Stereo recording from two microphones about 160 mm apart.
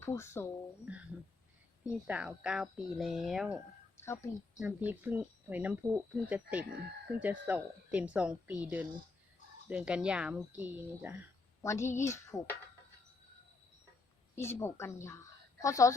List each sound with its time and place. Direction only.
0.0 s speech: 15° left (ahead or behind)
0.9 s speech: 10° right (ahead or behind)
4.0 s a woman's voice: 20° left (ahead or behind)
4.9 s speech: 10° right (ahead or behind)
11.6 s speech: 15° left (ahead or behind)
14.3 s a woman's voice: 15° left (ahead or behind)